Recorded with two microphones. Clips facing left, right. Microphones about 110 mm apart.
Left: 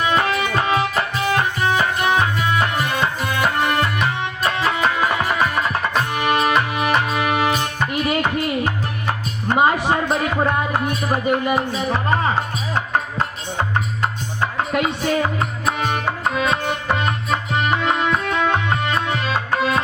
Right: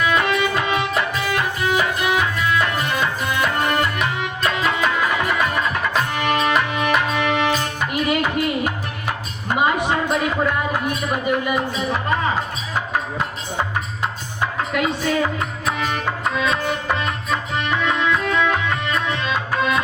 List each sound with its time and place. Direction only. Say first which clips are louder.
0.0 s music: even; 35° left (ahead or behind)
4.1 s tabla: even; 30° left (ahead or behind)
6.1 s music: left 2 dB; 35° left (ahead or behind)
9.6 s music: left 2 dB; 40° left (ahead or behind)
14.7 s music: left 1 dB; 30° left (ahead or behind)